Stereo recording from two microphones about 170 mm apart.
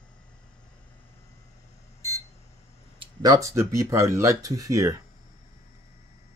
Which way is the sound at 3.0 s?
20° right (ahead or behind).